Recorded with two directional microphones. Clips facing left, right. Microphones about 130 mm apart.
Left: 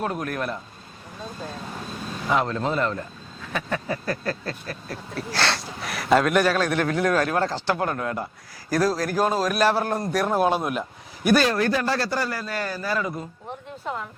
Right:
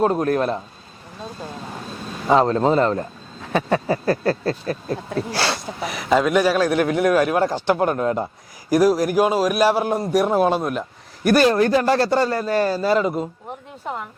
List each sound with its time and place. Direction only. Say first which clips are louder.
0.0 s speech: right 9 dB; 30° right (ahead or behind)
2.2 s speech: right 8 dB; 35° right (ahead or behind)
5.3 s gasp: right 2 dB; 5° right (ahead or behind)
6.6 s a man's voice: right 5 dB; 15° right (ahead or behind)
10.4 s speech: right 3 dB; centre (ahead or behind)
11.4 s a man's voice: right 6 dB; 25° right (ahead or behind)